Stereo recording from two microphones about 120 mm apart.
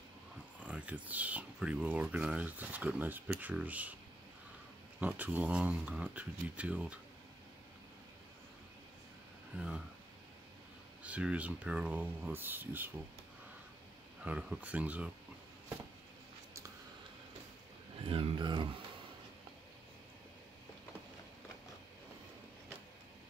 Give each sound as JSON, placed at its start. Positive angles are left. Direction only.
{"t": 0.6, "sound": "speech", "side_deg": -10}
{"t": 5.0, "sound": "speech", "side_deg": -15}
{"t": 11.0, "sound": "speech", "side_deg": -10}
{"t": 14.2, "sound": "speech", "side_deg": -10}
{"t": 18.0, "sound": "speech", "side_deg": -50}